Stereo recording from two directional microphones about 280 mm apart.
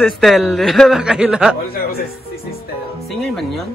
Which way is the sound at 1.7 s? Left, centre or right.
Left.